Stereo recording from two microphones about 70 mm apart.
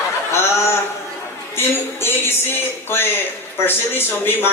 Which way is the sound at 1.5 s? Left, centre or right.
Left.